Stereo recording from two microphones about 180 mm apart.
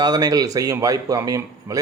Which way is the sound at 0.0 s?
20° right (ahead or behind).